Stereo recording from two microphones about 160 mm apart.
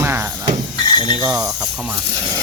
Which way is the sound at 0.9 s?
30° left (ahead or behind).